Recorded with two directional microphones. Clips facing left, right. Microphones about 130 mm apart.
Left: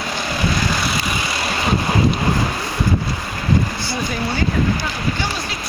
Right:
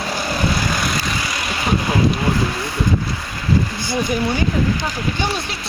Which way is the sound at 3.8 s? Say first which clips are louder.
Right 3 dB; 15° right (ahead or behind).